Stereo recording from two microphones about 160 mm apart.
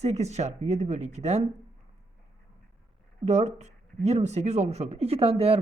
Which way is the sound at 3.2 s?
45° right (ahead or behind).